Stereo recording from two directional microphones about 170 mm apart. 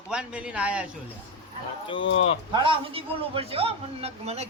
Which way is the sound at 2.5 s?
30° right (ahead or behind).